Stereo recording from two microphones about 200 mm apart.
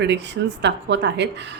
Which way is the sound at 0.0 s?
60° right (ahead or behind).